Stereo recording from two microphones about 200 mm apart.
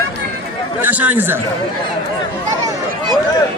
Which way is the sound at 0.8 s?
10° right (ahead or behind).